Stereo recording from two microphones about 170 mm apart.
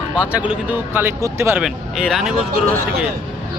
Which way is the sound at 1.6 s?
Centre (ahead or behind).